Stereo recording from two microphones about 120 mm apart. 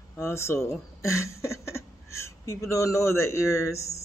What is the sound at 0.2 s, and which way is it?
Speech, 20° left (ahead or behind).